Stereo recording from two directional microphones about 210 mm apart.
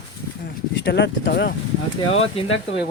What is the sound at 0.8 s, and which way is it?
Speech, 55° left (ahead or behind).